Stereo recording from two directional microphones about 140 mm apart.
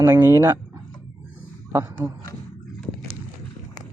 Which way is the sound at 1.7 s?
20° right (ahead or behind).